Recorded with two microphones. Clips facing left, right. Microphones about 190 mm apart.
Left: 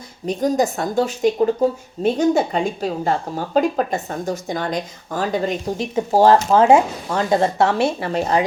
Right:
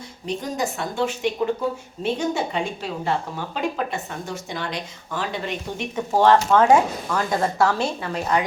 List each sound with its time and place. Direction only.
0.3 s a woman's voice: 40° left (ahead or behind)